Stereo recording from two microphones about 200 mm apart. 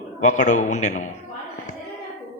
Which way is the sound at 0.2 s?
35° left (ahead or behind).